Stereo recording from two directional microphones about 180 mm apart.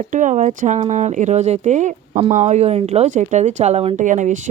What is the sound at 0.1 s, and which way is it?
Speech, 45° right (ahead or behind).